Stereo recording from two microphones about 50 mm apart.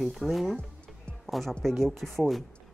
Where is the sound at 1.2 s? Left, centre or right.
Centre.